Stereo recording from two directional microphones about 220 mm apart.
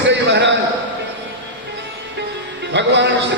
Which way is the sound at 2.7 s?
55° right (ahead or behind).